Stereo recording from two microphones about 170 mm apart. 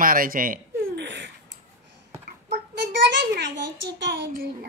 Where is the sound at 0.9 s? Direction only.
90° right.